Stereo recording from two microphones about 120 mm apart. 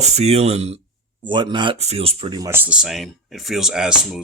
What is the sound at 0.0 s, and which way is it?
Speech, 65° right (ahead or behind).